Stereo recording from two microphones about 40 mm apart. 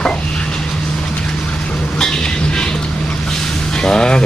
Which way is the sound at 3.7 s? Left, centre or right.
Centre.